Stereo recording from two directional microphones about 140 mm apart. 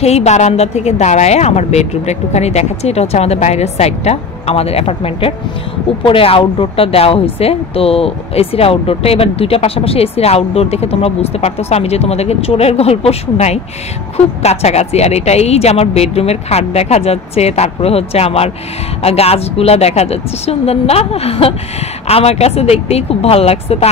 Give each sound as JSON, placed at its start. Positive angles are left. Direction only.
{"t": 0.0, "sound": "speech", "side_deg": 50}